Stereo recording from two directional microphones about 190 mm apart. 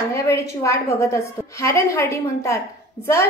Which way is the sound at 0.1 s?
15° left (ahead or behind).